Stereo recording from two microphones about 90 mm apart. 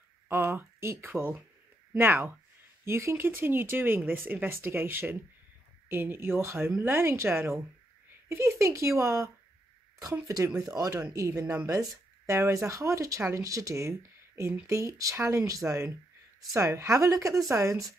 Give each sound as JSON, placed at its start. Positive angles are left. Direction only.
{"t": 0.3, "sound": "speech", "side_deg": -30}
{"t": 10.6, "sound": "speech", "side_deg": -40}